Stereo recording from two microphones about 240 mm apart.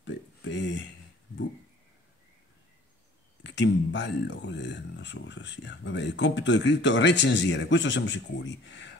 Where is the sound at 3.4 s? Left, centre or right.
Left.